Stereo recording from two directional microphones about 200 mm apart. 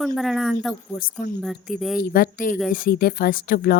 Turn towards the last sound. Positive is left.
turn(degrees=45)  # may be behind; listen again after turning